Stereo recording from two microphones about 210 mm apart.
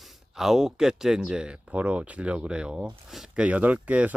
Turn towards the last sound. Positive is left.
turn(degrees=-5)  # may be behind; listen again after turning